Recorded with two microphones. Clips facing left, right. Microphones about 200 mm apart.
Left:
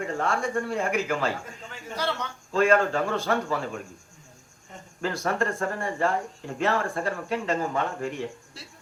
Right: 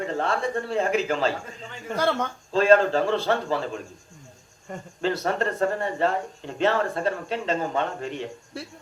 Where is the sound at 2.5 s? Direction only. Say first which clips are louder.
Right 3 dB; 30° right (ahead or behind).